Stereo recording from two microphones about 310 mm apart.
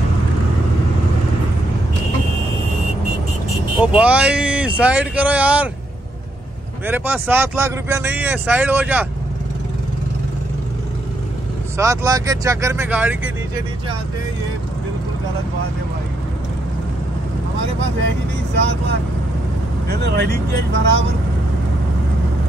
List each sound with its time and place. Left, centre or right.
3.8 s speech: centre
6.9 s speech: centre
11.7 s speech: centre
19.9 s speech: right